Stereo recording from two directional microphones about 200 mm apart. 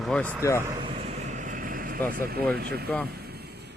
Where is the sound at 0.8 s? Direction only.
30° right (ahead or behind).